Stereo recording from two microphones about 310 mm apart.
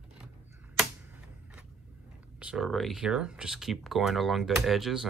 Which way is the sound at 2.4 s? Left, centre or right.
Centre.